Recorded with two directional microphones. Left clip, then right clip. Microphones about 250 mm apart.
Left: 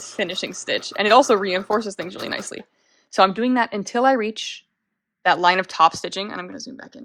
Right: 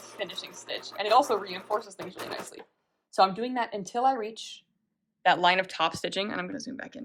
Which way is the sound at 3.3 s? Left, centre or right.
Left.